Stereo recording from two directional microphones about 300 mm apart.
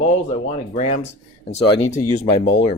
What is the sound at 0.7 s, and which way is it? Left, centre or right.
Speech, left.